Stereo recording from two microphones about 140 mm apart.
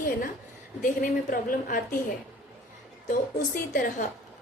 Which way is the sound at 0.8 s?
75° left (ahead or behind).